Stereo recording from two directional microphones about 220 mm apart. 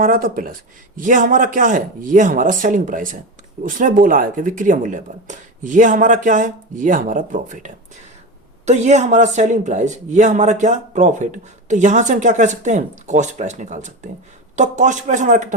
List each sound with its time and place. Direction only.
0.0 s a man's voice: 40° right (ahead or behind)